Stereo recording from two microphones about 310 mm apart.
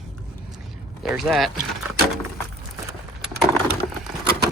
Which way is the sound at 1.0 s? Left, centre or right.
Centre.